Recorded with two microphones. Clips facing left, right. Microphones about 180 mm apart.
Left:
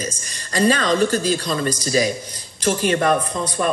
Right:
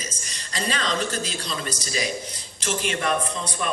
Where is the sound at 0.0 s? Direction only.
50° left (ahead or behind).